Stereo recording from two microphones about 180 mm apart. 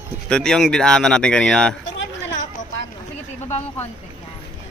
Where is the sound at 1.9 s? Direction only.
90° left.